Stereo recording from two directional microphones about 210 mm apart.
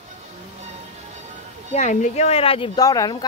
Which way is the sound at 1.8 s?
35° left (ahead or behind).